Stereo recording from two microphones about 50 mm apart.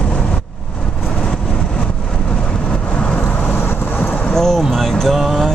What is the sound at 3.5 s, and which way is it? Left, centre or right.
Vehicle, left.